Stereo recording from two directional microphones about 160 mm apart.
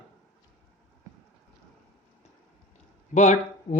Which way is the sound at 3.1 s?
50° left (ahead or behind).